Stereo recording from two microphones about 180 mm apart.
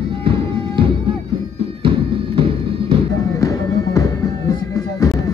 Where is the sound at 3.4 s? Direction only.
15° left (ahead or behind).